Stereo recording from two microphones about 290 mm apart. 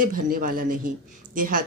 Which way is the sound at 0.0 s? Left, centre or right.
Right.